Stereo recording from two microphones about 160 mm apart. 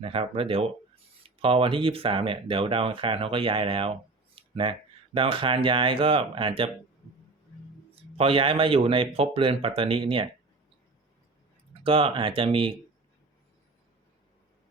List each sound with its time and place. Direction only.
0.0 s speech: 35° right (ahead or behind)
8.1 s speech: 35° right (ahead or behind)
11.7 s speech: 35° right (ahead or behind)